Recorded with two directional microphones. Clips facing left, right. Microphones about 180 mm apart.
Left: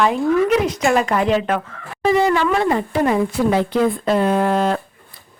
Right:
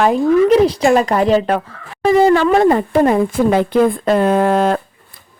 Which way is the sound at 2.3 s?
45° right (ahead or behind).